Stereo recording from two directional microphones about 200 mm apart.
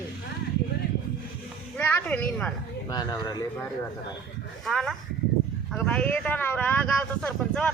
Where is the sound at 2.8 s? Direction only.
20° left (ahead or behind).